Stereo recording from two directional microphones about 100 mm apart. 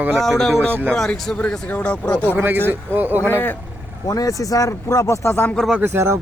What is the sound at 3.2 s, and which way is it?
Speech, 20° left (ahead or behind).